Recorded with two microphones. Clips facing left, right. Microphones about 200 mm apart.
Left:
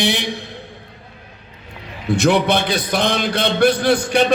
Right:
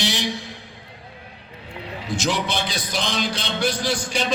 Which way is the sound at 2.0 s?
60° left (ahead or behind).